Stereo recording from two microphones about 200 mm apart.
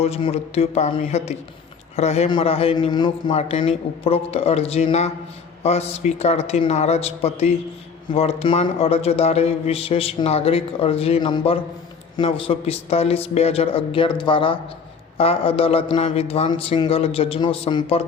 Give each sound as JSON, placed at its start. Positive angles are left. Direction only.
{"t": 0.0, "sound": "speech", "side_deg": 30}